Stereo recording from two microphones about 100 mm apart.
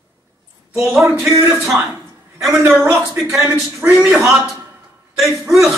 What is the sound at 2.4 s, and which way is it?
A man's voice, 5° right (ahead or behind).